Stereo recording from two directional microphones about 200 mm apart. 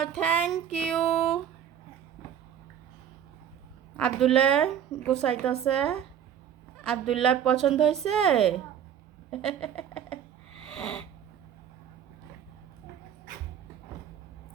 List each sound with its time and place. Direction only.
0.0 s a woman's voice: 5° left (ahead or behind)
3.9 s a woman's voice: 5° left (ahead or behind)
7.1 s a woman's voice: 5° left (ahead or behind)
9.3 s a sound: 5° left (ahead or behind)
10.7 s cat: 5° left (ahead or behind)